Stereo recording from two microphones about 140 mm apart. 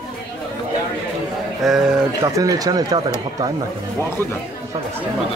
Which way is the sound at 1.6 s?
5° right (ahead or behind).